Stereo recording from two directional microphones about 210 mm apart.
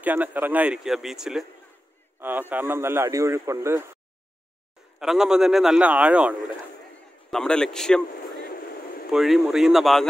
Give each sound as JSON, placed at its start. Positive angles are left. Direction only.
{"t": 0.0, "sound": "a man's voice", "side_deg": -10}
{"t": 5.0, "sound": "a man's voice", "side_deg": 0}
{"t": 8.4, "sound": "vehicle", "side_deg": 45}
{"t": 9.1, "sound": "a man's voice", "side_deg": 0}